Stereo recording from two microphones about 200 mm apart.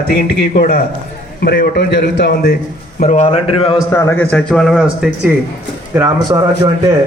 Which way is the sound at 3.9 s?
10° left (ahead or behind).